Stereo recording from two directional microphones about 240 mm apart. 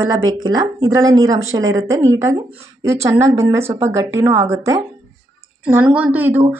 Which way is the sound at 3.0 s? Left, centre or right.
Centre.